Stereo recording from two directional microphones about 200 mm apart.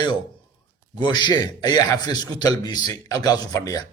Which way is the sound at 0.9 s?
20° left (ahead or behind).